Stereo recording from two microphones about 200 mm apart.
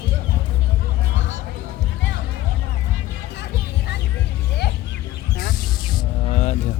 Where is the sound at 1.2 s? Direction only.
65° left (ahead or behind).